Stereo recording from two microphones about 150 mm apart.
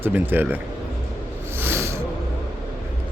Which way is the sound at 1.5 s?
15° right (ahead or behind).